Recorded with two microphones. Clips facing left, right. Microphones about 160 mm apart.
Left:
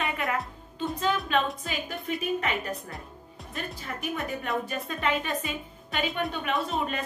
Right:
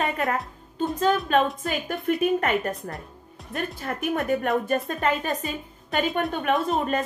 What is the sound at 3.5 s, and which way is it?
Speech, 55° right (ahead or behind).